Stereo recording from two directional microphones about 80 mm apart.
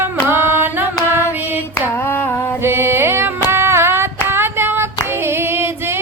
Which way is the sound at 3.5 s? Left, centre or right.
Right.